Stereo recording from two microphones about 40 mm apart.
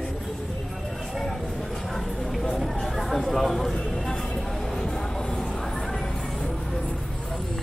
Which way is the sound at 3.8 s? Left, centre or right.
Centre.